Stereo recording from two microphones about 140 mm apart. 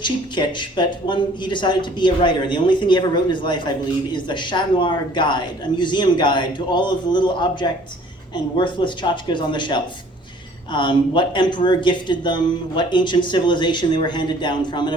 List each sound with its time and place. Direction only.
0.0 s speech: 35° left (ahead or behind)